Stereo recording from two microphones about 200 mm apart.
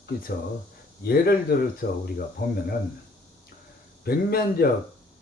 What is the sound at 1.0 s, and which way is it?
Speech, 50° left (ahead or behind).